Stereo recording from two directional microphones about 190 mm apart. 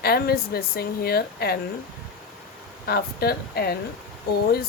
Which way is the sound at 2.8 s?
55° left (ahead or behind).